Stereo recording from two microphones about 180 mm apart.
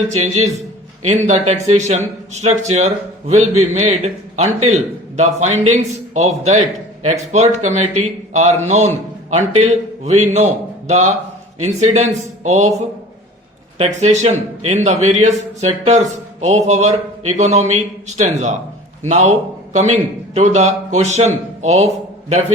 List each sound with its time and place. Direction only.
0.1 s a man's voice: 40° right (ahead or behind)
13.7 s a man's voice: 40° right (ahead or behind)